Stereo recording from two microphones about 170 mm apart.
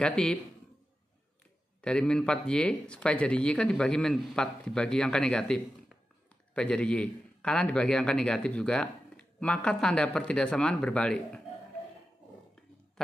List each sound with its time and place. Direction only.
0.0 s a man's voice: 5° left (ahead or behind)
1.8 s a man's voice: 5° left (ahead or behind)